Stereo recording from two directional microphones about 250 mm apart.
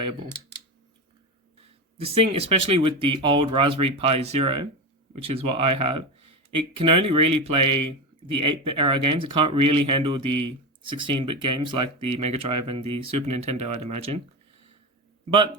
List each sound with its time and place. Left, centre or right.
2.1 s speech: right